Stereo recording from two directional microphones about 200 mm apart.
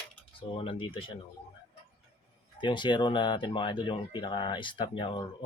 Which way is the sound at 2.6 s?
25° left (ahead or behind).